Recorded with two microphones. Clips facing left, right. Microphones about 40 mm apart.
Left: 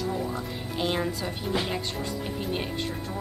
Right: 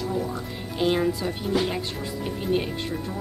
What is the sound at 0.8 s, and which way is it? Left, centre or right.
Speech, centre.